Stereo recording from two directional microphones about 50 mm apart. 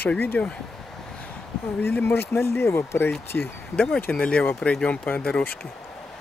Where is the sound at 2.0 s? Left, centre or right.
Left.